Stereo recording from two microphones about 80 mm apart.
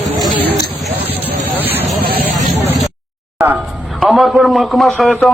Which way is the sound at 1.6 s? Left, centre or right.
Right.